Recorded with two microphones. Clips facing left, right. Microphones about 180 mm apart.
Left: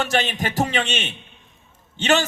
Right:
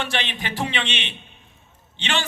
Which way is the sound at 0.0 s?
45° left (ahead or behind).